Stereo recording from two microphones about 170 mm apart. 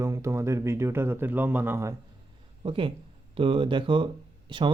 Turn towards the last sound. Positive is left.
turn(degrees=-30)  # may be behind; listen again after turning